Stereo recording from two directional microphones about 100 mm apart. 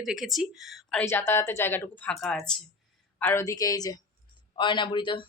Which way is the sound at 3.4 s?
35° left (ahead or behind).